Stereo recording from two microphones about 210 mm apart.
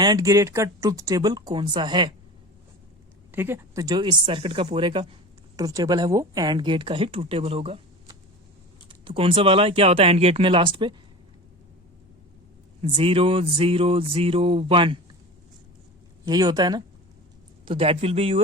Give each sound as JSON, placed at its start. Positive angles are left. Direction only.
{"t": 0.0, "sound": "speech", "side_deg": -15}
{"t": 3.3, "sound": "speech", "side_deg": -10}
{"t": 12.8, "sound": "speech", "side_deg": -25}
{"t": 16.2, "sound": "speech", "side_deg": -20}